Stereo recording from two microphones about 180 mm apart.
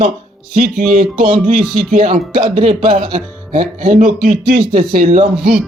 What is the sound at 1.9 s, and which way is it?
Music, 50° right (ahead or behind).